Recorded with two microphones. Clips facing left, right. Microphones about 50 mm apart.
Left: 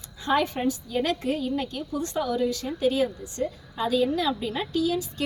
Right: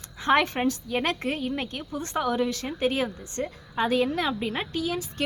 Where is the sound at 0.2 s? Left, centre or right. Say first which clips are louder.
Right 2 dB; right.